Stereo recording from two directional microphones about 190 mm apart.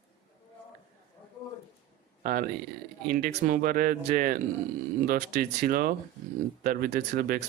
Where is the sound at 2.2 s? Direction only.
45° right (ahead or behind).